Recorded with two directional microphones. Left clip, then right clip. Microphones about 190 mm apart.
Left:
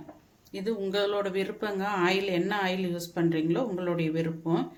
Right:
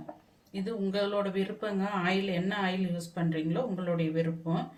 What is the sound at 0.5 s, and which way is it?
Speech, 50° left (ahead or behind).